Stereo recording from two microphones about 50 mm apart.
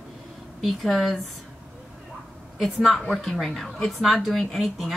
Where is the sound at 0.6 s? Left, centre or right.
Centre.